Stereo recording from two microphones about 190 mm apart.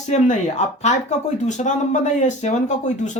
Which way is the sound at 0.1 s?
35° left (ahead or behind).